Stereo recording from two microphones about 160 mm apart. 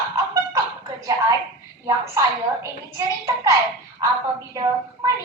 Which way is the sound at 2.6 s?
20° right (ahead or behind).